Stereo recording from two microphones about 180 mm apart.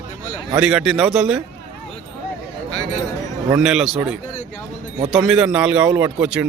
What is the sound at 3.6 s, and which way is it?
A man's voice, 5° right (ahead or behind).